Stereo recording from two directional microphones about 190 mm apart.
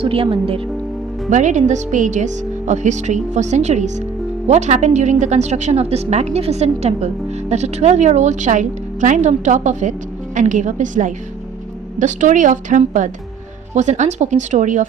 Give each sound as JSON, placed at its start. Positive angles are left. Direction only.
{"t": 0.0, "sound": "speech", "side_deg": -30}
{"t": 1.3, "sound": "speech", "side_deg": -40}